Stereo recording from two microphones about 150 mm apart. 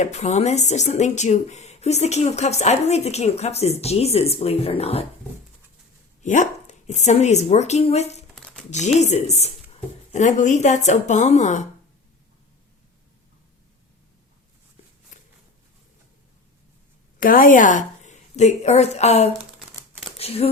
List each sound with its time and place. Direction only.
0.0 s speech: 50° left (ahead or behind)
6.2 s speech: 55° left (ahead or behind)
15.1 s a sound: 55° left (ahead or behind)
17.2 s a woman's voice: 65° left (ahead or behind); by 19.3 s 45° left (ahead or behind)
19.5 s crumpling: centre (ahead or behind)
20.1 s speech: 40° left (ahead or behind)